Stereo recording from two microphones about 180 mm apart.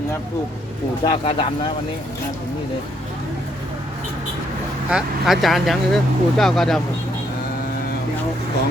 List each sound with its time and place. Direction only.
1.0 s speech: 30° left (ahead or behind)
4.9 s speech: 5° right (ahead or behind)